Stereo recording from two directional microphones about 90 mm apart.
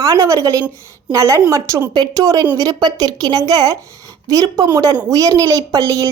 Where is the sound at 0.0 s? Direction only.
35° right (ahead or behind).